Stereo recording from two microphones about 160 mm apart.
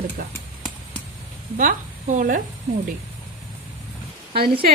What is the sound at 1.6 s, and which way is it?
Speech, 55° right (ahead or behind).